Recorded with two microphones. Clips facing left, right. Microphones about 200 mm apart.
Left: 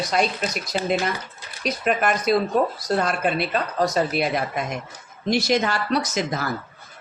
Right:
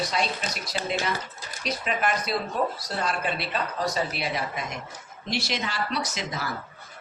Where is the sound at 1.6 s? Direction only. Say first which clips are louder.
Left 6 dB; 50° left (ahead or behind).